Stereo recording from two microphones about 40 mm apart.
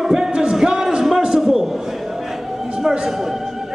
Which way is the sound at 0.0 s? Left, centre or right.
Centre.